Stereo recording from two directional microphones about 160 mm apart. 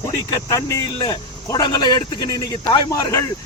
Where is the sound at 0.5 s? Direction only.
20° left (ahead or behind).